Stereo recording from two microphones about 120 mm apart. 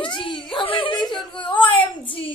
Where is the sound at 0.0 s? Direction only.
45° left (ahead or behind).